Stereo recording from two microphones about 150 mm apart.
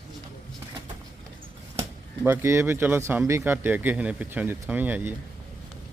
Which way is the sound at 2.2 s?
15° right (ahead or behind).